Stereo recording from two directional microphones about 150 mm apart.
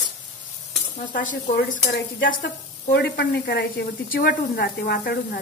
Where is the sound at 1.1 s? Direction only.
60° left (ahead or behind).